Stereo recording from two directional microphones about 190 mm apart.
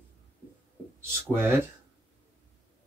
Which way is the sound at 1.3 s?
10° right (ahead or behind).